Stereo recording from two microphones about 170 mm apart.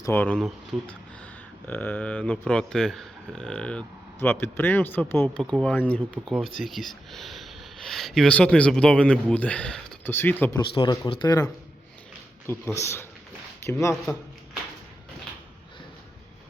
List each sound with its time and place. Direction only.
0.0 s speech: 10° left (ahead or behind)
5.4 s speech: 5° left (ahead or behind)
10.8 s speech: 30° left (ahead or behind)
12.5 s speech: 15° left (ahead or behind)